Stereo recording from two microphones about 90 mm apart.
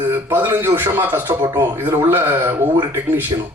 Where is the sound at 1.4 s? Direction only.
45° right (ahead or behind).